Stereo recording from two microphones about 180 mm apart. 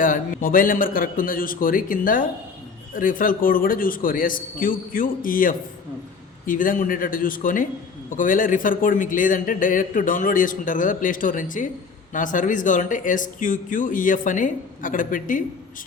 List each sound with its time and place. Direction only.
0.0 s a man's voice: 50° left (ahead or behind)